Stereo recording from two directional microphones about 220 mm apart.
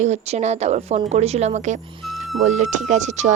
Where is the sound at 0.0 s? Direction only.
30° right (ahead or behind).